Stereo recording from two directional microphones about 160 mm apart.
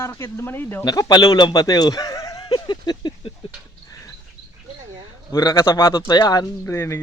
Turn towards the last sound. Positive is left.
turn(degrees=15)  # may be behind; listen again after turning